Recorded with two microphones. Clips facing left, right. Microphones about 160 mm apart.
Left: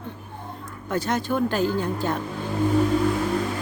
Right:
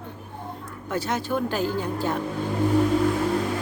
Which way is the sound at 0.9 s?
5° right (ahead or behind).